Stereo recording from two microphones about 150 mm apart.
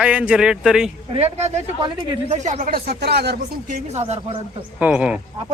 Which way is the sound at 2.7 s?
90° right.